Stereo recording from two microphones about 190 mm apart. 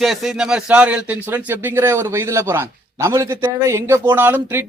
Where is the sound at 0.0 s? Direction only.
Centre (ahead or behind).